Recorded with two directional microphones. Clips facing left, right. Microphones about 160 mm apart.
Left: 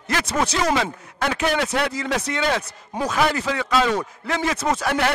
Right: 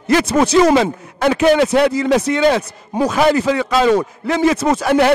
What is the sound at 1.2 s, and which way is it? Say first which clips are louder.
Speech: right 10 dB; 15° right (ahead or behind).